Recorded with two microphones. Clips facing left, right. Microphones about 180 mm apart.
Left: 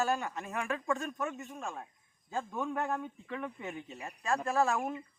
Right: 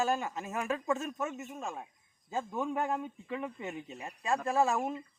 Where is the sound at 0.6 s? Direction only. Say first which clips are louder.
Right 2 dB; 20° right (ahead or behind).